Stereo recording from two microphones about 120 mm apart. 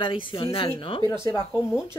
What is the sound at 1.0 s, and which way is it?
Speech, 40° right (ahead or behind).